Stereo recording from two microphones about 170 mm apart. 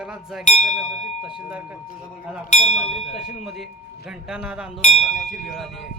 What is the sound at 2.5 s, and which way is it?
Speech, 40° left (ahead or behind).